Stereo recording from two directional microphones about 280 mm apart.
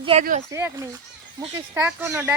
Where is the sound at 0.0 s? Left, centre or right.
Right.